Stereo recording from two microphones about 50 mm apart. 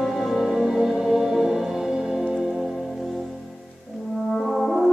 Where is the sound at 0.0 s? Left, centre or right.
Centre.